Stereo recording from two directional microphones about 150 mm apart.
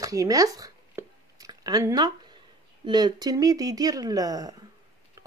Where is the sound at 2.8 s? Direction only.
30° right (ahead or behind).